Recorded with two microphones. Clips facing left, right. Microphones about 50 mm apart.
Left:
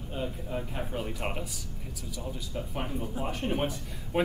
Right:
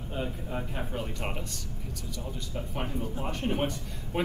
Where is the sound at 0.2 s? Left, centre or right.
Centre.